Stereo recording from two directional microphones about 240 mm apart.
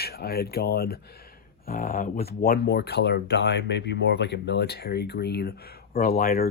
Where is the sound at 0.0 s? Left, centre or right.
Left.